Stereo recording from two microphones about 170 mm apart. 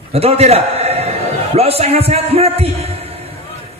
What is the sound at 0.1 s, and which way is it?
A man's voice, 35° right (ahead or behind).